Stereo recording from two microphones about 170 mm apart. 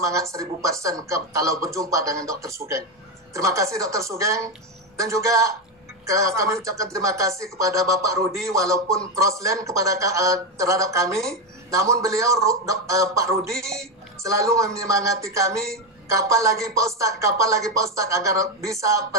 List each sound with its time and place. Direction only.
0.0 s speech: 20° right (ahead or behind)